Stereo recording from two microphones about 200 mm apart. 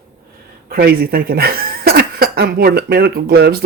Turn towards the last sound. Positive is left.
turn(degrees=-55)  # may be behind; listen again after turning